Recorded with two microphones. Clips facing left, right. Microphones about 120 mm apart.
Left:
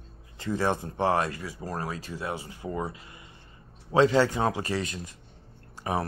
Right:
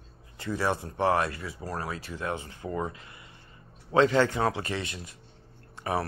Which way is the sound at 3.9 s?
15° left (ahead or behind).